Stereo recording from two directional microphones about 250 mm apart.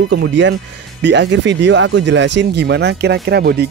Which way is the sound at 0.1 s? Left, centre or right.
Right.